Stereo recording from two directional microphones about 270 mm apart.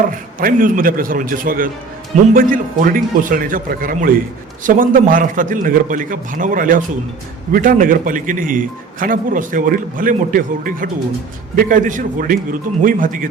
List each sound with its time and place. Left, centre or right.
0.3 s a man's voice: right